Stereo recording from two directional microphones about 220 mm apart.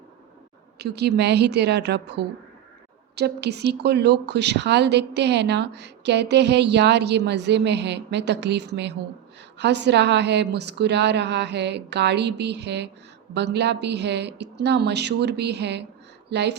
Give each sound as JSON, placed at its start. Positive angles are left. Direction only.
{"t": 0.8, "sound": "a woman's voice", "side_deg": -50}